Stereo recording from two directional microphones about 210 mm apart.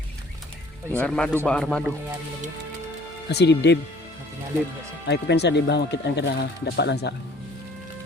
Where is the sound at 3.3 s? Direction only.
55° left (ahead or behind).